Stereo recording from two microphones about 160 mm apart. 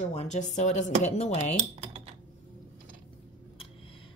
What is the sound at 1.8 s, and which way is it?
Computer keyboard, 35° right (ahead or behind).